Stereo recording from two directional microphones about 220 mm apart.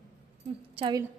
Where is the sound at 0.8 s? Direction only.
20° right (ahead or behind).